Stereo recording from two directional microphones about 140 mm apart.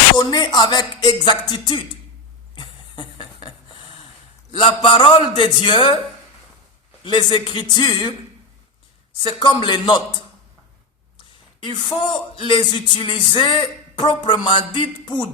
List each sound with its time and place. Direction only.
0.2 s a man's voice: 30° left (ahead or behind)
2.6 s a sound: 35° left (ahead or behind)
4.5 s a man's voice: 35° left (ahead or behind)
7.0 s a man's voice: 35° left (ahead or behind)
9.2 s a man's voice: 35° left (ahead or behind)
11.6 s a man's voice: 30° left (ahead or behind)